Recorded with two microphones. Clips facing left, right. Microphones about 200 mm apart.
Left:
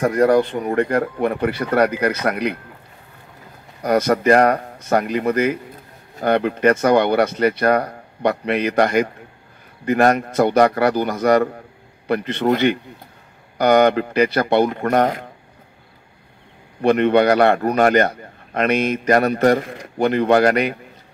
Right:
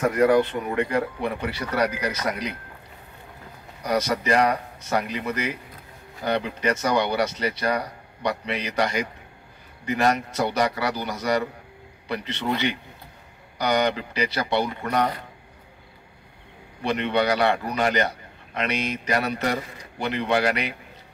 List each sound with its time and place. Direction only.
0.0 s a man's voice: 40° left (ahead or behind); by 2.5 s 60° left (ahead or behind)
3.8 s a man's voice: 50° left (ahead or behind)
16.8 s a man's voice: 50° left (ahead or behind)